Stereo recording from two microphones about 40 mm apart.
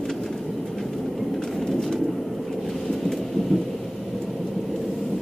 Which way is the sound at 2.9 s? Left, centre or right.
Centre.